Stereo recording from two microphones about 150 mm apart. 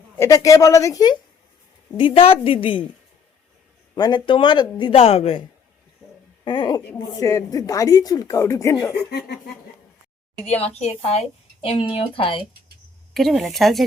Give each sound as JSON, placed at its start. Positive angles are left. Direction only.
{"t": 0.2, "sound": "a woman's voice", "side_deg": 20}
{"t": 2.0, "sound": "speech", "side_deg": 35}
{"t": 3.9, "sound": "speech", "side_deg": 30}
{"t": 6.4, "sound": "a woman's voice", "side_deg": 30}
{"t": 9.0, "sound": "laughter", "side_deg": 90}
{"t": 10.4, "sound": "a woman's voice", "side_deg": 45}
{"t": 13.1, "sound": "speech", "side_deg": 0}